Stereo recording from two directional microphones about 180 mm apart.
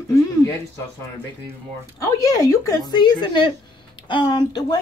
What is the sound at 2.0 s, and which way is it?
Speech, 15° left (ahead or behind).